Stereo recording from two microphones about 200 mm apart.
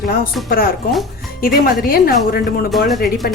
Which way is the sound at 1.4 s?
45° left (ahead or behind).